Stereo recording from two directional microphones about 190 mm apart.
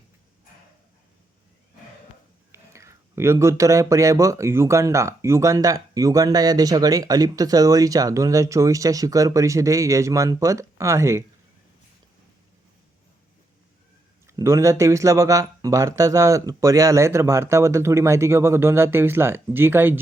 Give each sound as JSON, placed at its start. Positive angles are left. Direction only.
{"t": 2.7, "sound": "speech", "side_deg": -15}
{"t": 14.3, "sound": "speech", "side_deg": -15}